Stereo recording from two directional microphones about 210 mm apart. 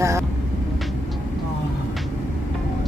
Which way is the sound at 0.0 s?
15° right (ahead or behind).